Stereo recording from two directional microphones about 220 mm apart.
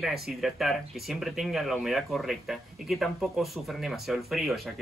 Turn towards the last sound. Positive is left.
turn(degrees=0)  # may be behind; listen again after turning